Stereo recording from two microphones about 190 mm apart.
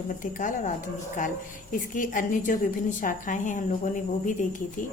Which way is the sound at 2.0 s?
45° left (ahead or behind).